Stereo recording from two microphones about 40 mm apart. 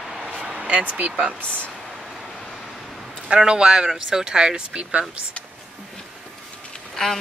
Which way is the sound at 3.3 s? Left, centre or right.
Centre.